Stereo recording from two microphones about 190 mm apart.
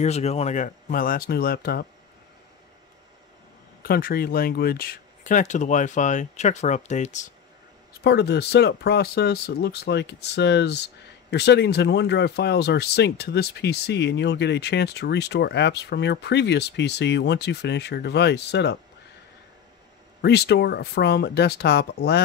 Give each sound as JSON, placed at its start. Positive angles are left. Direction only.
{"t": 0.0, "sound": "speech", "side_deg": 35}
{"t": 3.8, "sound": "speech", "side_deg": 50}
{"t": 8.0, "sound": "speech", "side_deg": 60}
{"t": 20.2, "sound": "speech", "side_deg": 60}